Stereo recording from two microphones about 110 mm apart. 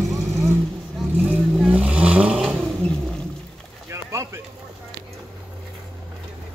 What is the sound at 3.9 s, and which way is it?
Bird, 30° right (ahead or behind).